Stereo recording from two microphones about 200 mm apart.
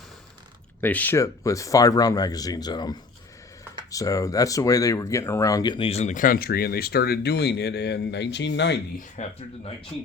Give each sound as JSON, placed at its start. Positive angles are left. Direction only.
{"t": 0.8, "sound": "speech", "side_deg": 10}
{"t": 3.9, "sound": "speech", "side_deg": 15}
{"t": 9.2, "sound": "speech", "side_deg": 35}